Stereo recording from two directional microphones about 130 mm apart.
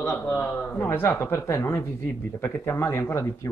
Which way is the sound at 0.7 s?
15° left (ahead or behind).